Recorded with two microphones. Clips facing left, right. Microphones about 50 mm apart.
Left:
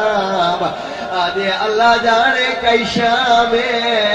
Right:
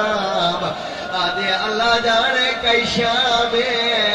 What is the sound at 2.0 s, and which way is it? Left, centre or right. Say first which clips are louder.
Music: left 4 dB; left.